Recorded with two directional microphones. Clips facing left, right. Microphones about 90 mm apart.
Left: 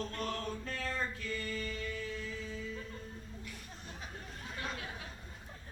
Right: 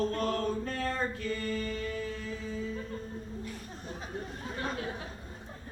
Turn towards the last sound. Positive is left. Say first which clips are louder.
# right 6 dB
turn(degrees=-35)  # may be behind; listen again after turning